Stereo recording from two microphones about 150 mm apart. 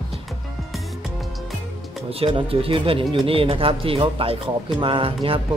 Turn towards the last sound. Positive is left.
turn(degrees=-35)  # may be behind; listen again after turning